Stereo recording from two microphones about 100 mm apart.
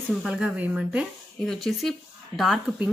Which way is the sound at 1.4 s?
5° left (ahead or behind).